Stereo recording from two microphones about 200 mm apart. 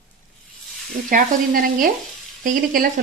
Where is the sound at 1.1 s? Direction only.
45° right (ahead or behind).